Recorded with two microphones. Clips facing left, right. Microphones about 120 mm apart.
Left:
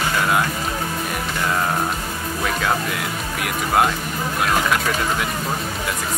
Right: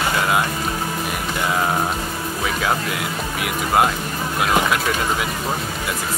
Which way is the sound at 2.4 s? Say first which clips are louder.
Even; centre (ahead or behind).